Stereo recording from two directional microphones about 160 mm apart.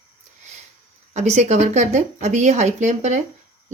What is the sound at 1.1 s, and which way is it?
Speech, 45° right (ahead or behind).